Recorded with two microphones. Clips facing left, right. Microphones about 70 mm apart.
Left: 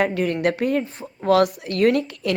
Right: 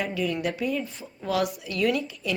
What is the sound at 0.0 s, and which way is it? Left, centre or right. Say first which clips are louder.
Speech: left 7 dB; left.